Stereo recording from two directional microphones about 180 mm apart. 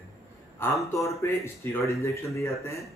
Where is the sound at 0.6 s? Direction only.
10° left (ahead or behind).